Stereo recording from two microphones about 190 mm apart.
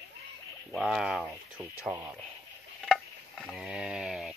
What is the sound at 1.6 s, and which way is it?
Speech, 10° right (ahead or behind).